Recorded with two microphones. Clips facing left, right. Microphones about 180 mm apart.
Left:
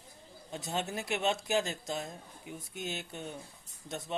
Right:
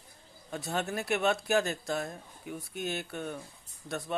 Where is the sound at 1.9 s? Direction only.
60° right (ahead or behind).